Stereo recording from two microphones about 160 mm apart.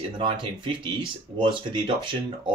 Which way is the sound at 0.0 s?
30° right (ahead or behind).